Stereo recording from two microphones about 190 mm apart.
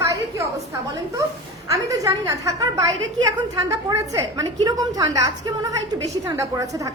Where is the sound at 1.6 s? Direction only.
15° right (ahead or behind).